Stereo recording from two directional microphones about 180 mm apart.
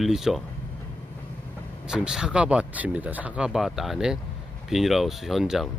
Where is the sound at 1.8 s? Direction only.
5° right (ahead or behind).